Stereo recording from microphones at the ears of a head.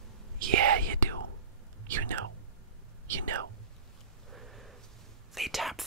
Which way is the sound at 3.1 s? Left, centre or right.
Right.